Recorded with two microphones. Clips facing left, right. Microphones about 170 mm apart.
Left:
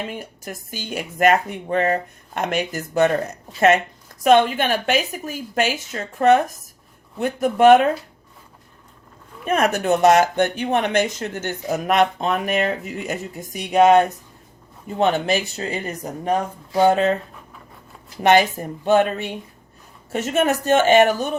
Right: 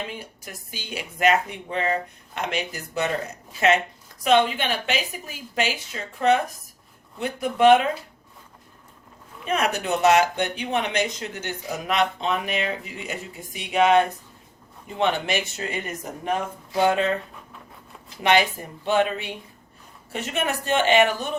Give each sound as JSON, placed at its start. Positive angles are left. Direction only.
{"t": 0.1, "sound": "speech", "side_deg": 45}
{"t": 4.2, "sound": "speech", "side_deg": 50}
{"t": 9.4, "sound": "speech", "side_deg": 50}
{"t": 18.2, "sound": "speech", "side_deg": 45}